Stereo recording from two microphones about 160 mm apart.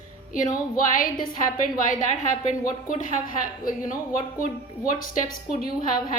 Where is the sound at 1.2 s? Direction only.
60° left (ahead or behind).